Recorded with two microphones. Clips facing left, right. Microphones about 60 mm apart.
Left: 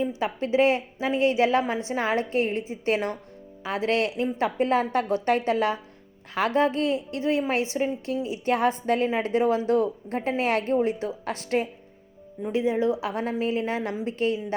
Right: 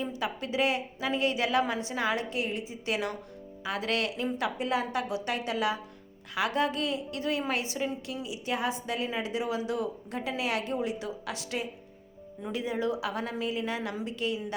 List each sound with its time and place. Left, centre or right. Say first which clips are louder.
0.0 s a woman's voice: left 6 dB; left
12.5 s a woman's voice: left 7 dB; left